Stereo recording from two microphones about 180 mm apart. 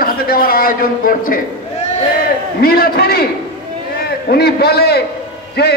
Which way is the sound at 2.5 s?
55° left (ahead or behind).